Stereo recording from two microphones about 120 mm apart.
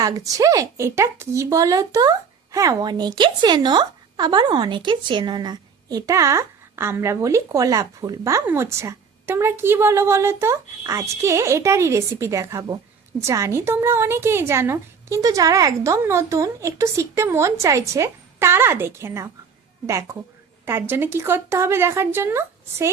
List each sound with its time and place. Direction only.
0.0 s speech: 30° right (ahead or behind)